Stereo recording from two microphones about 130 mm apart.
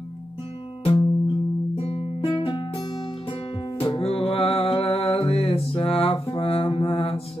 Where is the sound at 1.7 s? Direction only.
50° left (ahead or behind).